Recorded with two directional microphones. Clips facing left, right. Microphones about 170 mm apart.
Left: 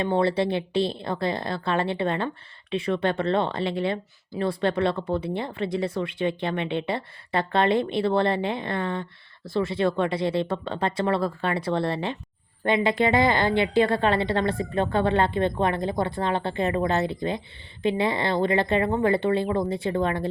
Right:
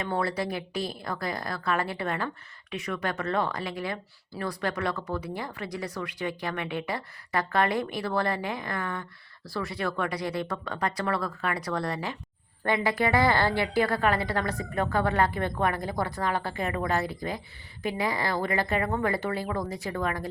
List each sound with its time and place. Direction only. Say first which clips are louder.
0.0 s speech: left 7 dB; 25° left (ahead or behind)